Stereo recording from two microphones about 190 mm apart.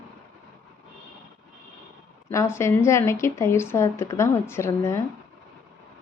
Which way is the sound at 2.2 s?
15° left (ahead or behind).